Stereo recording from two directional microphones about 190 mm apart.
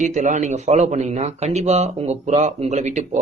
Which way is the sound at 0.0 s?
40° right (ahead or behind).